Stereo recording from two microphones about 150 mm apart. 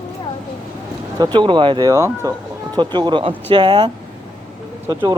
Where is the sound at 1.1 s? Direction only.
30° right (ahead or behind).